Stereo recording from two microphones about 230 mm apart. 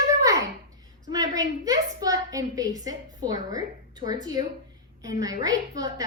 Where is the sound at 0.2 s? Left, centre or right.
Centre.